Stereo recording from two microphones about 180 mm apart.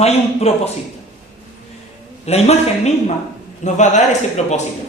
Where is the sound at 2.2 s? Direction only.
35° left (ahead or behind).